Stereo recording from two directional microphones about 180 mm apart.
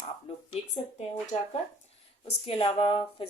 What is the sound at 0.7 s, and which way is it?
Speech, 40° left (ahead or behind).